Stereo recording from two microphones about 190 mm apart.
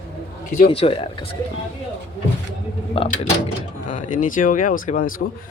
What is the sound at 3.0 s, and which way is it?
Speech, 35° left (ahead or behind).